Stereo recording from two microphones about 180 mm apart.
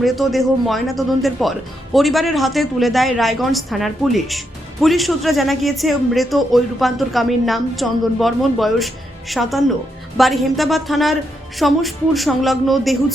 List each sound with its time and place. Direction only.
0.0 s speech: centre (ahead or behind)